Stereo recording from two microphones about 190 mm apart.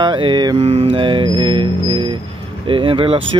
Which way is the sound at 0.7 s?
30° right (ahead or behind).